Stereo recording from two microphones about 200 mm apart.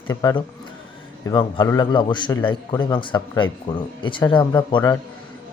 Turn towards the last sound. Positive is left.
turn(degrees=20)  # may be behind; listen again after turning